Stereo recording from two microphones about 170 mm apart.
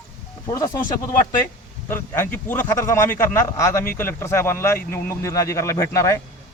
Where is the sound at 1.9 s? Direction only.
10° left (ahead or behind).